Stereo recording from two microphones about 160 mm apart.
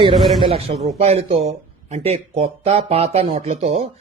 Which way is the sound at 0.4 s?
35° right (ahead or behind).